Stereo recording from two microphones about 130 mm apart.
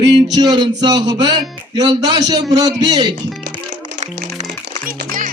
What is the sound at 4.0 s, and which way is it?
Music, 75° right (ahead or behind).